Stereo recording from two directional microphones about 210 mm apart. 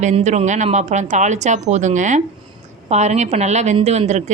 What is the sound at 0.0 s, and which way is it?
A woman's voice, 30° right (ahead or behind).